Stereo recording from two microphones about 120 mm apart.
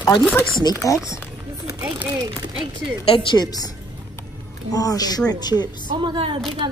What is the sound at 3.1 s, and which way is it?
A woman's voice, 45° left (ahead or behind).